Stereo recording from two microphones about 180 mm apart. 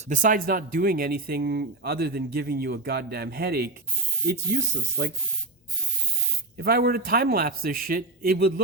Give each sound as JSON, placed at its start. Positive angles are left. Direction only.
{"t": 0.1, "sound": "speech", "side_deg": -45}
{"t": 4.3, "sound": "speech", "side_deg": -75}
{"t": 6.6, "sound": "speech", "side_deg": -60}